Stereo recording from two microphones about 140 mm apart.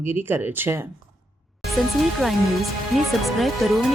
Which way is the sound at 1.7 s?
Centre (ahead or behind).